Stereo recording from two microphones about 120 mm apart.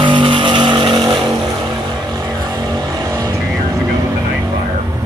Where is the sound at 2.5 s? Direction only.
30° right (ahead or behind).